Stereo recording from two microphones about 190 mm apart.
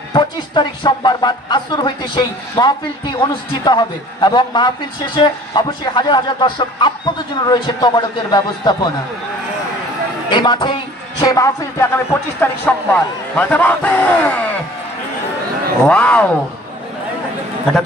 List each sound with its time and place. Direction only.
0.1 s a man's voice: 25° left (ahead or behind)
10.3 s speech: 25° left (ahead or behind); by 14.6 s 10° left (ahead or behind)
15.9 s speech: 5° left (ahead or behind)